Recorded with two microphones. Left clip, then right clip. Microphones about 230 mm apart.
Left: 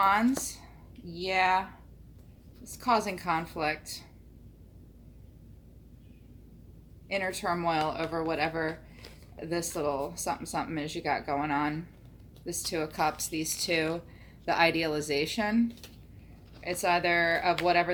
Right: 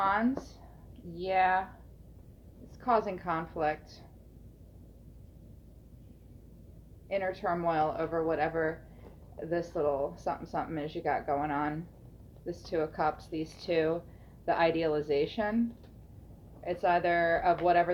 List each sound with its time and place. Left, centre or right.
0.0 s a woman's voice: left
2.8 s speech: left
7.1 s speech: left